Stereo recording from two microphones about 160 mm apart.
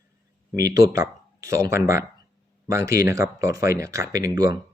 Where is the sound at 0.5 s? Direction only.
20° right (ahead or behind).